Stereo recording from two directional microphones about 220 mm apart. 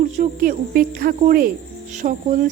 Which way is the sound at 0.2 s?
40° right (ahead or behind).